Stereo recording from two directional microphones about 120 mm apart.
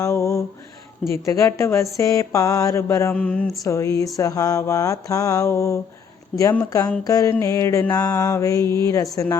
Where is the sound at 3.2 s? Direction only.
10° left (ahead or behind).